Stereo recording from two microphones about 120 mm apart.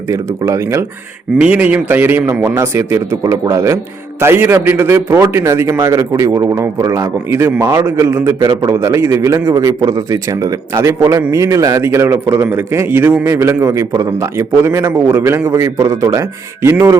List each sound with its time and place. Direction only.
0.1 s a man's voice: 25° right (ahead or behind)
1.4 s a man's voice: 10° right (ahead or behind)